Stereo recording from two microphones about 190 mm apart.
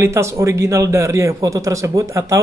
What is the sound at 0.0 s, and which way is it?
A man's voice, 15° right (ahead or behind).